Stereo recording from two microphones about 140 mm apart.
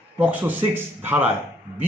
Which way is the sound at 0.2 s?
10° right (ahead or behind).